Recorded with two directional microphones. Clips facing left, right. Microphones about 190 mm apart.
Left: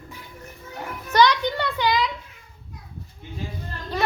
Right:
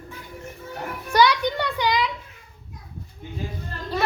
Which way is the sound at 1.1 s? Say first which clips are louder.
Even; 10° right (ahead or behind).